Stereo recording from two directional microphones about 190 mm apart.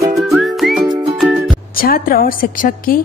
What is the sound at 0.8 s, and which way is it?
Music, 20° right (ahead or behind).